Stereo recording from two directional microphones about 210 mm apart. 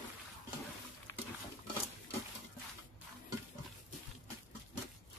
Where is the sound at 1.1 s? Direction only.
15° left (ahead or behind).